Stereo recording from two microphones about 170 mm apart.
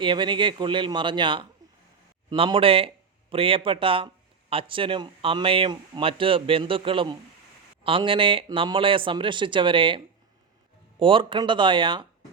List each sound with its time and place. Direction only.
0.0 s speech: 30° right (ahead or behind)
11.0 s speech: 30° right (ahead or behind)